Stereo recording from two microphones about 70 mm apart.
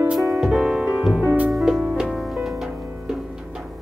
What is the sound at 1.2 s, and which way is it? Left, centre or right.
Music, right.